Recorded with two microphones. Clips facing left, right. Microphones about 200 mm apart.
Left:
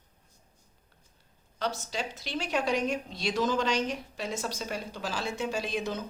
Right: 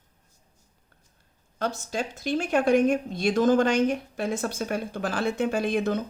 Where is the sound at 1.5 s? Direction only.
50° right (ahead or behind).